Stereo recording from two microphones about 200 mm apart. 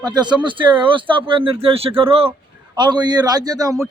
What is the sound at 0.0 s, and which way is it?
A man's voice, 20° right (ahead or behind).